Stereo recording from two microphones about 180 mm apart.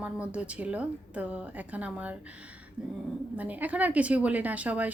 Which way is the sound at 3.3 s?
10° right (ahead or behind).